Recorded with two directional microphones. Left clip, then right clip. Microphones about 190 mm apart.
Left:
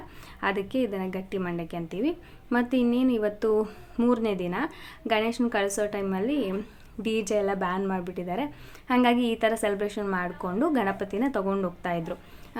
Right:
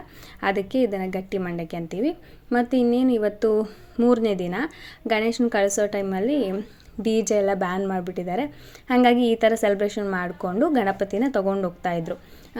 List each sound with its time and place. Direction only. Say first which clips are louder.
0.3 s a woman's voice: right 5 dB; 20° right (ahead or behind)